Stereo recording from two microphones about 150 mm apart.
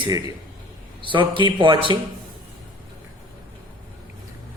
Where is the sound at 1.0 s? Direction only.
35° right (ahead or behind).